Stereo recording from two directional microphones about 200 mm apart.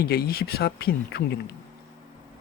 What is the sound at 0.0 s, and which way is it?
Speech, 50° left (ahead or behind).